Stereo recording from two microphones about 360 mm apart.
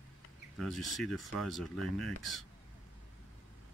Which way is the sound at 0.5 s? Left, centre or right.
Centre.